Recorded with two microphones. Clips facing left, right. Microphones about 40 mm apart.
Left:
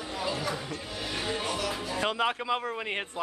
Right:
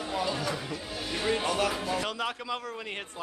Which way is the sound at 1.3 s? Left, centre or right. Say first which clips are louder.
Right 6 dB; right.